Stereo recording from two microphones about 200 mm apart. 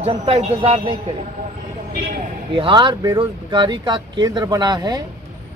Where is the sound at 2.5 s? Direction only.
25° right (ahead or behind).